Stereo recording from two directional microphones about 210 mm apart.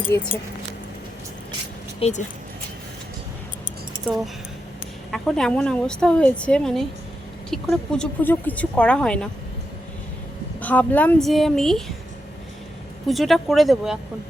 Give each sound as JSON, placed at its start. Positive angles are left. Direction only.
{"t": 0.1, "sound": "speech", "side_deg": 55}
{"t": 2.0, "sound": "speech", "side_deg": 30}
{"t": 5.1, "sound": "speech", "side_deg": 5}
{"t": 10.6, "sound": "speech", "side_deg": 5}
{"t": 13.1, "sound": "speech", "side_deg": 0}